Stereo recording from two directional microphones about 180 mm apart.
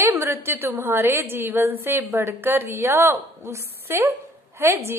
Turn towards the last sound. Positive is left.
turn(degrees=-15)  # may be behind; listen again after turning